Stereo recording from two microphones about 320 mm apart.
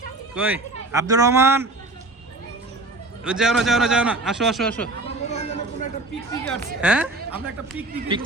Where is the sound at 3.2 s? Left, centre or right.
Centre.